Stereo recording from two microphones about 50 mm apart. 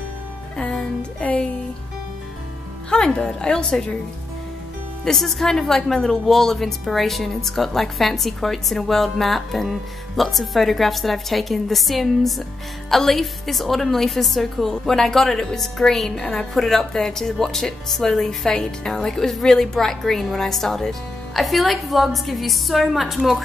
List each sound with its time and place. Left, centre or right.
2.9 s speech: centre
5.0 s a woman's voice: centre